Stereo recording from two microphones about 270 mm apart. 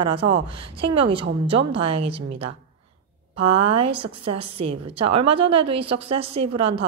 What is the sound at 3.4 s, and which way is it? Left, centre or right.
Speech, right.